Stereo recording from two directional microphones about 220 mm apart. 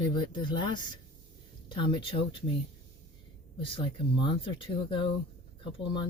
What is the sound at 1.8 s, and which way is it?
Speech, 20° left (ahead or behind).